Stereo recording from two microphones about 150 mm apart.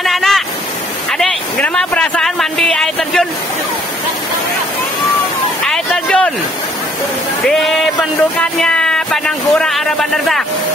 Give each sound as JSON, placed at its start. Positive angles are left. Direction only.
{"t": 0.0, "sound": "waterfall", "side_deg": 0}
{"t": 1.1, "sound": "speech", "side_deg": 5}
{"t": 5.7, "sound": "a sound", "side_deg": 5}
{"t": 7.4, "sound": "speech", "side_deg": 0}